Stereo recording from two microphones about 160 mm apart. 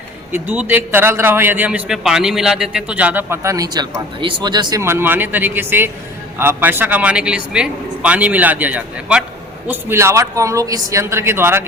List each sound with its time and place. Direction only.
0.3 s a man's voice: 15° right (ahead or behind)
4.8 s a man's voice: 15° right (ahead or behind)